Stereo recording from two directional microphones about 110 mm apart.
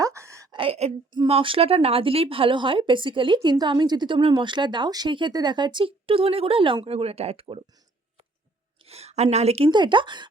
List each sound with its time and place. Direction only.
0.0 s a sound: 25° right (ahead or behind)
0.5 s a sound: 55° right (ahead or behind)
1.3 s speech: 55° right (ahead or behind)
6.8 s speech: 70° right (ahead or behind)
8.8 s a woman's voice: 70° right (ahead or behind)
9.6 s speech: 45° right (ahead or behind)